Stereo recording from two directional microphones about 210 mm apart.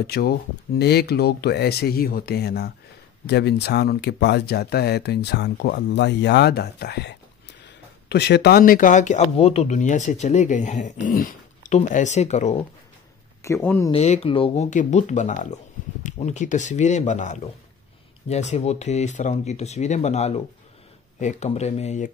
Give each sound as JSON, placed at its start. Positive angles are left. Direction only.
{"t": 0.0, "sound": "speech", "side_deg": 50}
{"t": 13.4, "sound": "speech", "side_deg": 10}
{"t": 13.9, "sound": "speech", "side_deg": 30}